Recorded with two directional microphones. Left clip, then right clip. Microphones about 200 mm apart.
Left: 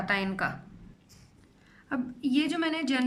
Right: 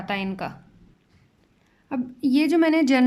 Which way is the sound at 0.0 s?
15° right (ahead or behind).